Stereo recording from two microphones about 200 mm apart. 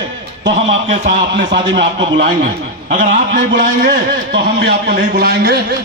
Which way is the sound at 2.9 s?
40° right (ahead or behind).